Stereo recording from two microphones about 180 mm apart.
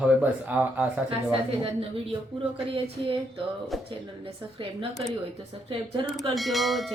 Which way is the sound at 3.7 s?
Centre (ahead or behind).